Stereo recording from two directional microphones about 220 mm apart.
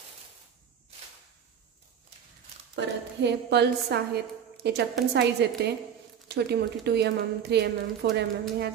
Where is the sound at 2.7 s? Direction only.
50° right (ahead or behind).